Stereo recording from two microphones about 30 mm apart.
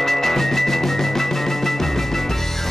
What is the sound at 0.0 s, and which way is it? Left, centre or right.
Music, centre.